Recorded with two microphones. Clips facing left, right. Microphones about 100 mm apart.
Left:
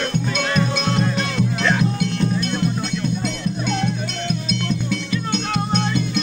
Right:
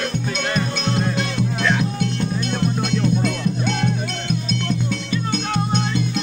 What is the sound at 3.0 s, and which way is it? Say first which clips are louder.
Music: right 4 dB; 70° right (ahead or behind).